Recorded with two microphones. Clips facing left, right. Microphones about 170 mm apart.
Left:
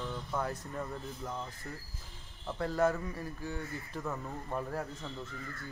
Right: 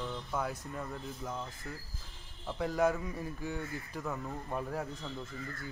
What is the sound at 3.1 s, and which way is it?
Speech, 15° right (ahead or behind).